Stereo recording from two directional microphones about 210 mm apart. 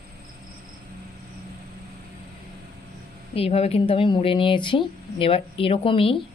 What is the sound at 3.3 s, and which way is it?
A woman's voice, 30° left (ahead or behind).